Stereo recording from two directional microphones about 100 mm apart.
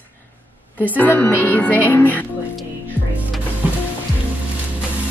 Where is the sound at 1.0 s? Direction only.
15° left (ahead or behind).